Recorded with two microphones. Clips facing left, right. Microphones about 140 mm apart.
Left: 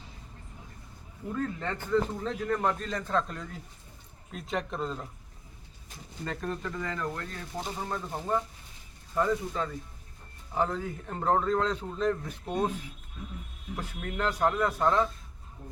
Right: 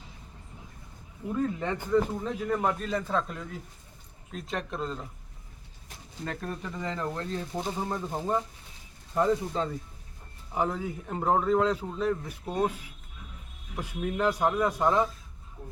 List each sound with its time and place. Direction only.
1.3 s speech: 15° right (ahead or behind)
6.2 s speech: centre (ahead or behind)
6.6 s speech: 10° right (ahead or behind)
6.8 s speech: 25° right (ahead or behind)
7.8 s speech: 15° right (ahead or behind)
9.1 s speech: 30° right (ahead or behind)
10.5 s speech: 10° right (ahead or behind)